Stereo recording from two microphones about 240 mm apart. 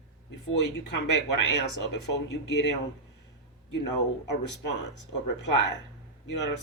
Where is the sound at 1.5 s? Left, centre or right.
Left.